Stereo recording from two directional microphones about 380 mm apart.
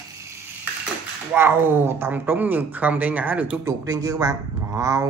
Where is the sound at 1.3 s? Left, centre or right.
Centre.